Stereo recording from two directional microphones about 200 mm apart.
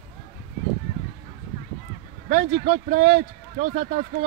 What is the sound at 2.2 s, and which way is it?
Speech, 35° right (ahead or behind).